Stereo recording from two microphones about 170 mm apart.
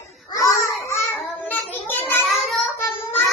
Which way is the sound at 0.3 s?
20° left (ahead or behind).